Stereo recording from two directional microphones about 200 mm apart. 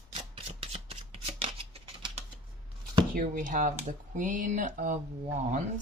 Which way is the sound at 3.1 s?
40° right (ahead or behind).